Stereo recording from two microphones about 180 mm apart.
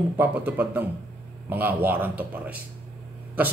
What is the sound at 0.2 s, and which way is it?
Speech, 10° right (ahead or behind).